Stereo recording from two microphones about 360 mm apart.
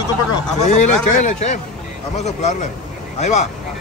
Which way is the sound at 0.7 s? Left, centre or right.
Centre.